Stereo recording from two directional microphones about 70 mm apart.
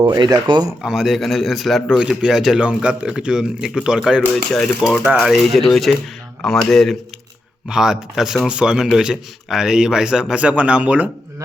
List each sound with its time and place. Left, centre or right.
0.3 s speech: right
0.8 s a man's voice: centre
2.6 s a man's voice: centre
7.7 s speech: centre